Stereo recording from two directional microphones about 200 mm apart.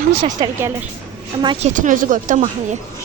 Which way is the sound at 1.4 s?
35° right (ahead or behind).